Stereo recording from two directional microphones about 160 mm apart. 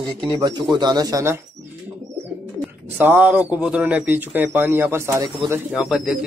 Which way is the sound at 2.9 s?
10° right (ahead or behind).